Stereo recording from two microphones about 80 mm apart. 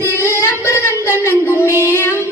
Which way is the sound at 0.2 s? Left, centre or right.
Left.